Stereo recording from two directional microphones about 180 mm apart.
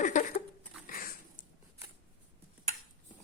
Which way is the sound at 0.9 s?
55° left (ahead or behind).